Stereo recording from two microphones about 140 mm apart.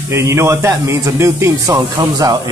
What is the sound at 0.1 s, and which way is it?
Speech, 20° right (ahead or behind).